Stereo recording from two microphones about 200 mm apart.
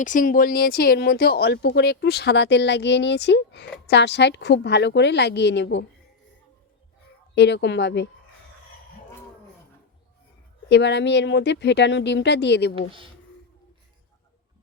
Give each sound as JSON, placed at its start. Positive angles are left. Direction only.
{"t": 0.0, "sound": "speech", "side_deg": 40}
{"t": 7.3, "sound": "speech", "side_deg": 60}
{"t": 10.7, "sound": "speech", "side_deg": 60}